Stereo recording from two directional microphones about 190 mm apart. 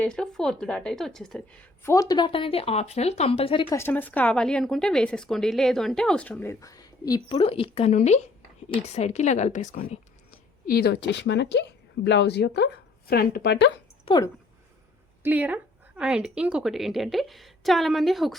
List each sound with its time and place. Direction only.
0.0 s speech: 5° left (ahead or behind)
1.8 s speech: 15° left (ahead or behind)
3.8 s a woman's voice: 10° left (ahead or behind); by 10.0 s 40° left (ahead or behind)
10.7 s a woman's voice: 60° left (ahead or behind)
14.0 s speech: 25° left (ahead or behind)
15.2 s speech: 10° right (ahead or behind)